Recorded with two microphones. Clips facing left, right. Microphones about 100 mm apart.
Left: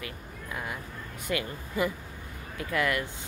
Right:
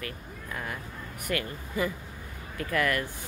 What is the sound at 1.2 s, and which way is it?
Speech, 15° left (ahead or behind).